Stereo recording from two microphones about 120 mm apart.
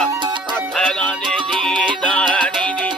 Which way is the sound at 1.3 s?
5° left (ahead or behind).